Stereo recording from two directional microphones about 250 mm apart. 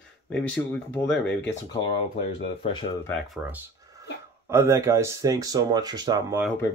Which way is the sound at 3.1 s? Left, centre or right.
Centre.